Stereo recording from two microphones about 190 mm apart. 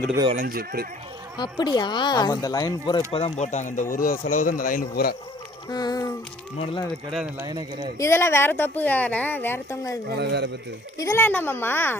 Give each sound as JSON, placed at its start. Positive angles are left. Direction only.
{"t": 0.3, "sound": "speech", "side_deg": -50}
{"t": 1.4, "sound": "speech", "side_deg": 20}
{"t": 5.6, "sound": "speech", "side_deg": 20}
{"t": 7.3, "sound": "speech", "side_deg": -20}
{"t": 7.9, "sound": "speech", "side_deg": 15}
{"t": 10.1, "sound": "speech", "side_deg": -60}
{"t": 10.9, "sound": "speech", "side_deg": 15}